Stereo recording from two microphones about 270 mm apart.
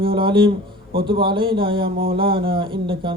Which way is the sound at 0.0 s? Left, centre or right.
Centre.